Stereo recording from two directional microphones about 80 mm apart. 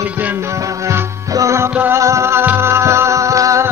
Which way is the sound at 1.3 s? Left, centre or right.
Right.